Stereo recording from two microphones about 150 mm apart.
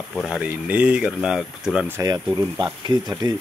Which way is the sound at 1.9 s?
25° right (ahead or behind).